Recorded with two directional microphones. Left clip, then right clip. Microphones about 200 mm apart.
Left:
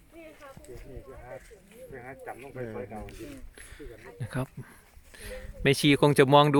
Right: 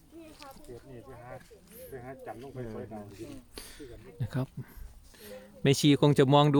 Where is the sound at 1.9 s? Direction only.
55° right (ahead or behind).